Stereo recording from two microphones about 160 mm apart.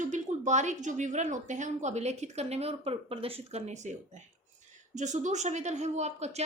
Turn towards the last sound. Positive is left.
turn(degrees=-45)  # may be behind; listen again after turning